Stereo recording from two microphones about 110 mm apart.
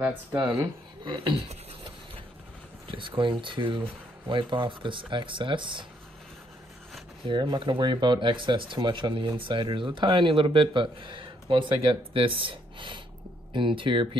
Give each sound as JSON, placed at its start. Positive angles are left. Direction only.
{"t": 1.0, "sound": "speech", "side_deg": -45}
{"t": 2.9, "sound": "speech", "side_deg": -50}
{"t": 7.2, "sound": "speech", "side_deg": -45}